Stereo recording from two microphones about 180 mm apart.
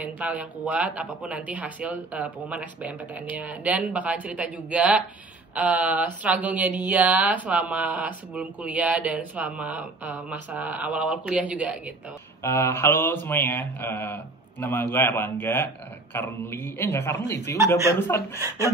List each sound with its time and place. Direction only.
0.0 s speech: 5° right (ahead or behind)
12.4 s a man's voice: 15° left (ahead or behind)